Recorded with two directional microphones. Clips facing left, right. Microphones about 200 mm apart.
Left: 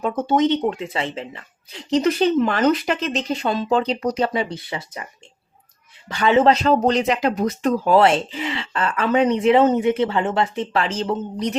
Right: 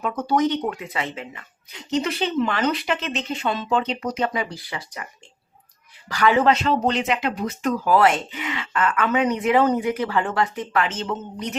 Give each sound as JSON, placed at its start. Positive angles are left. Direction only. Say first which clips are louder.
{"t": 0.0, "sound": "speech", "louder": "left 3 dB", "side_deg": 25}
{"t": 6.1, "sound": "speech", "louder": "left 2 dB", "side_deg": 25}